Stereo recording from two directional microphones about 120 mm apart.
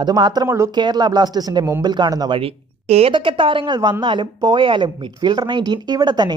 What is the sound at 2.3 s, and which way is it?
Speech, 55° right (ahead or behind).